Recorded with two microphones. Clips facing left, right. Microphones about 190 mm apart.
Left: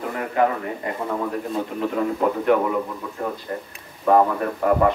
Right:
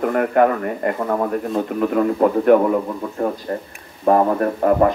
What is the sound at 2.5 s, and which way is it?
A man's voice, 40° right (ahead or behind).